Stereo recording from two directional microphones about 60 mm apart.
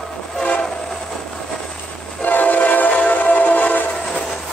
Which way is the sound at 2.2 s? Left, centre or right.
Left.